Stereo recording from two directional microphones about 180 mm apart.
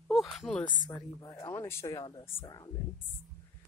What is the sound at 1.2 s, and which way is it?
Speech, 20° left (ahead or behind).